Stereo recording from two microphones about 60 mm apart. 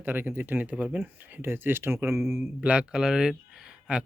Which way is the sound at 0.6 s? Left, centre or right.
Right.